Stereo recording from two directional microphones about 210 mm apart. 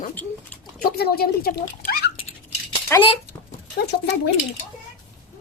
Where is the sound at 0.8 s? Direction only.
45° left (ahead or behind).